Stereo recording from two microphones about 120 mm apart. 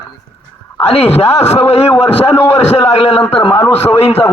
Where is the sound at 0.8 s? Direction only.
60° left (ahead or behind).